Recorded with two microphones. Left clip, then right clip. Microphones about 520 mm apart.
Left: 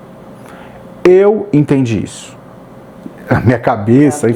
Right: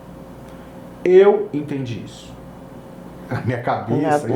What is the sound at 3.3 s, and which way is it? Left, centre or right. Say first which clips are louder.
Speech: left 10 dB; left.